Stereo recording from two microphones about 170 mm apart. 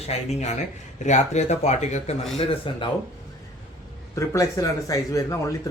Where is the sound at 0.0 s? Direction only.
40° left (ahead or behind).